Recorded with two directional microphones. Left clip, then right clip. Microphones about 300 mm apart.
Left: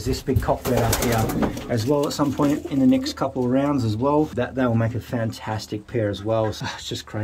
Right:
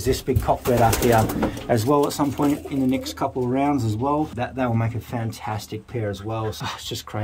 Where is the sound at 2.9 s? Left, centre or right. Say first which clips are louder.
Left 2 dB; centre.